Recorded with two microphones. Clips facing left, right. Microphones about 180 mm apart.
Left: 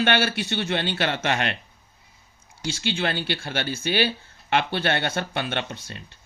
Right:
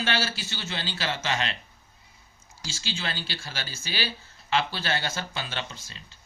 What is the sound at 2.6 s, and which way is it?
Speech, 60° left (ahead or behind).